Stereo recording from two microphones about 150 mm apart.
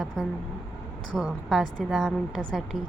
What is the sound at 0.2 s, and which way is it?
A woman's voice, centre (ahead or behind).